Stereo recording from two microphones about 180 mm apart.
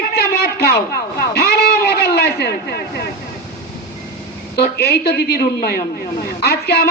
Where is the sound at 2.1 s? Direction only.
60° left (ahead or behind).